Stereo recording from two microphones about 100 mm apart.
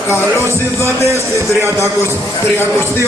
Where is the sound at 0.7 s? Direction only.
25° left (ahead or behind).